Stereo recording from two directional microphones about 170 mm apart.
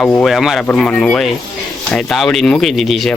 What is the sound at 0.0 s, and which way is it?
Speech, 5° left (ahead or behind).